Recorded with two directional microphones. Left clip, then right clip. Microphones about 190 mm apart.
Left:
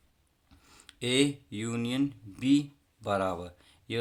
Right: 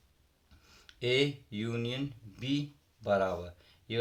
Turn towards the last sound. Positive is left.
turn(degrees=35)  # may be behind; listen again after turning